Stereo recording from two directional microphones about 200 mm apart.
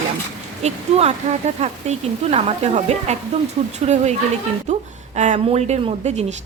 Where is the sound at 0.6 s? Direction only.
35° right (ahead or behind).